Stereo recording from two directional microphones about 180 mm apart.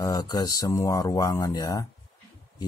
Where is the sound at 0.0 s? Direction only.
20° left (ahead or behind).